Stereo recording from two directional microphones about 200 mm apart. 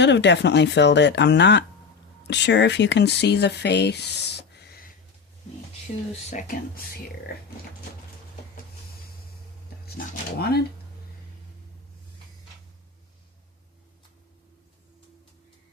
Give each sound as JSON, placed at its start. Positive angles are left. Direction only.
{"t": 0.0, "sound": "speech", "side_deg": 60}
{"t": 6.3, "sound": "speech", "side_deg": 45}
{"t": 9.8, "sound": "speech", "side_deg": 50}